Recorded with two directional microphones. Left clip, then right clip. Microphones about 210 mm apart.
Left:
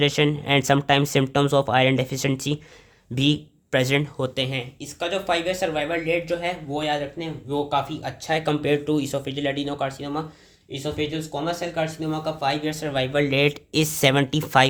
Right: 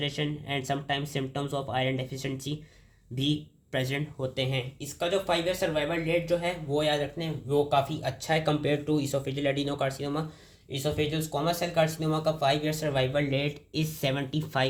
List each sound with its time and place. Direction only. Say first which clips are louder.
0.0 s speech: left 11 dB; 50° left (ahead or behind)
4.4 s speech: left 4 dB; 20° left (ahead or behind)
13.3 s speech: left 10 dB; 40° left (ahead or behind)